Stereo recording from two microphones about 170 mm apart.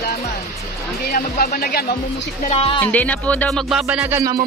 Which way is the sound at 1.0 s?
60° left (ahead or behind).